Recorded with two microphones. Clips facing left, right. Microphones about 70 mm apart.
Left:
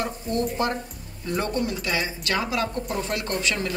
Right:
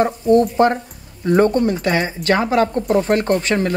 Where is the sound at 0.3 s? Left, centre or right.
Right.